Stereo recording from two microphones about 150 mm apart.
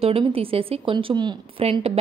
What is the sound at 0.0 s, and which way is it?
A woman's voice, 40° right (ahead or behind).